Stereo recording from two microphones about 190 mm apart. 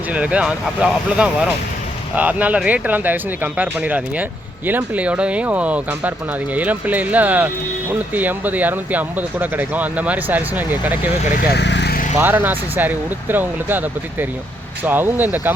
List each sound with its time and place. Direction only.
0.1 s speech: 5° right (ahead or behind)
11.5 s vehicle: 65° left (ahead or behind)
12.2 s speech: 10° right (ahead or behind)